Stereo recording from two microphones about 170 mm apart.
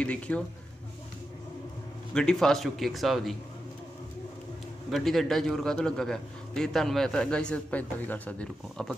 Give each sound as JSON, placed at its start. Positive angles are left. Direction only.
{"t": 0.0, "sound": "speech", "side_deg": 5}
{"t": 2.1, "sound": "a man's voice", "side_deg": 5}
{"t": 4.9, "sound": "a man's voice", "side_deg": 0}